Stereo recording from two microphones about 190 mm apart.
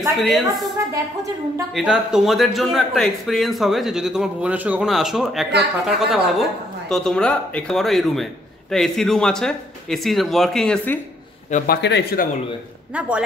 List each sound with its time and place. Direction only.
0.0 s a man's voice: centre (ahead or behind)
1.8 s a man's voice: 5° right (ahead or behind)
11.5 s a man's voice: 55° left (ahead or behind)